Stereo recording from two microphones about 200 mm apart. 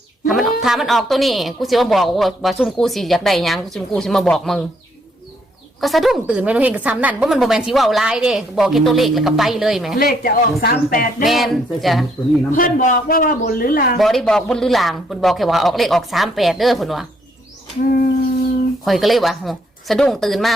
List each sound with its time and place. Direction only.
0.3 s a woman's voice: centre (ahead or behind)
5.8 s a woman's voice: centre (ahead or behind)
10.0 s a man's voice: 50° left (ahead or behind)
11.3 s a woman's voice: centre (ahead or behind)
12.5 s a man's voice: 45° left (ahead or behind)
14.0 s a woman's voice: centre (ahead or behind)
18.9 s a woman's voice: centre (ahead or behind)